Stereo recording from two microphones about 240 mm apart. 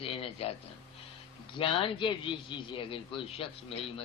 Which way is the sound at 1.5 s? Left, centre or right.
Left.